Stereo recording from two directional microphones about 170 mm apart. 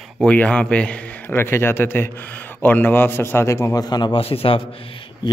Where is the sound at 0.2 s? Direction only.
5° left (ahead or behind).